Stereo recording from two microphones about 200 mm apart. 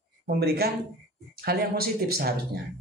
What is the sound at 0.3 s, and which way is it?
Speech, 50° right (ahead or behind).